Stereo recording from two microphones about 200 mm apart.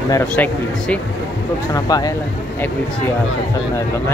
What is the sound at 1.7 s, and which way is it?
Speech, 20° left (ahead or behind).